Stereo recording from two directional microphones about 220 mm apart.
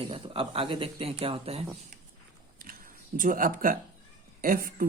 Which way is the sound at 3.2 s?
40° right (ahead or behind).